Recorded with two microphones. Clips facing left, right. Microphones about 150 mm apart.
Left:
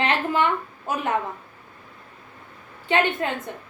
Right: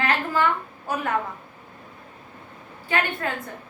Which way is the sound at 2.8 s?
20° left (ahead or behind).